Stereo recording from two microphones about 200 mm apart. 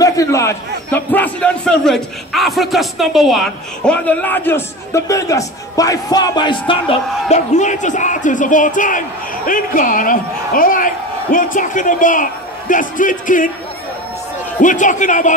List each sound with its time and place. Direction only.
0.0 s a man's voice: 15° left (ahead or behind); by 13.5 s 40° left (ahead or behind)
14.6 s a man's voice: 40° left (ahead or behind)